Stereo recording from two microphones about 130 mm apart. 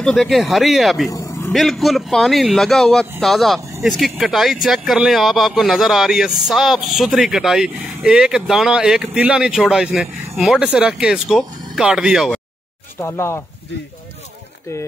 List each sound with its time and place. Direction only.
0.0 s speech: centre (ahead or behind)
1.1 s a sound: 25° left (ahead or behind)
1.5 s speech: centre (ahead or behind)
13.0 s speech: 20° left (ahead or behind)